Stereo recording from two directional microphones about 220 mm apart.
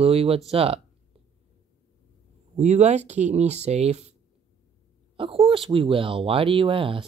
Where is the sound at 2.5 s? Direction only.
30° right (ahead or behind).